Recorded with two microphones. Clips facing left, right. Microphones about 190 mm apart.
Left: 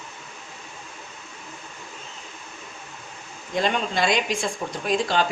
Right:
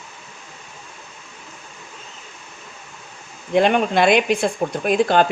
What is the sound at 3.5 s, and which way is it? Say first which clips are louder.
Speech: right 8 dB; 60° right (ahead or behind).